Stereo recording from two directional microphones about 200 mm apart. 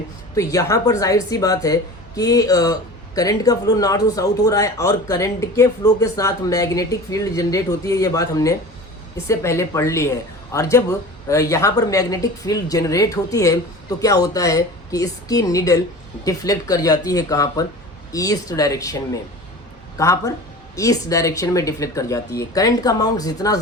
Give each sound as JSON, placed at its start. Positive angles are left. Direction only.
{"t": 0.3, "sound": "speech", "side_deg": 15}